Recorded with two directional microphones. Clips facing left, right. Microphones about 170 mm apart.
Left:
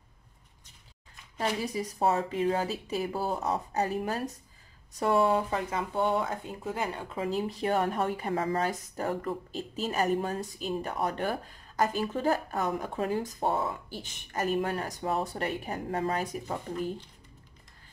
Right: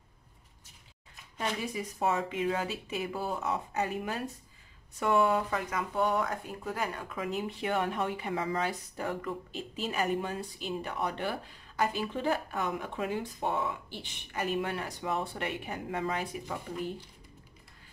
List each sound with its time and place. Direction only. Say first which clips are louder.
1.4 s speech: left 3 dB; 35° left (ahead or behind)